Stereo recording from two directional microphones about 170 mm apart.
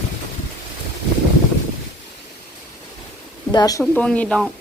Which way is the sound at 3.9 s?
10° left (ahead or behind).